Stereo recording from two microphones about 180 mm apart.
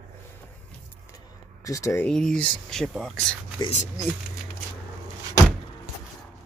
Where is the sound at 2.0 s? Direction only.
5° left (ahead or behind).